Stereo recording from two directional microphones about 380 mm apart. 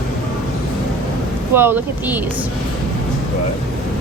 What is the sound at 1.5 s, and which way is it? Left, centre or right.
Speech, centre.